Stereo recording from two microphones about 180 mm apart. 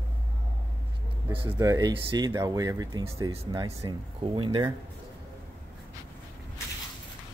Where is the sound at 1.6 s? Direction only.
20° right (ahead or behind).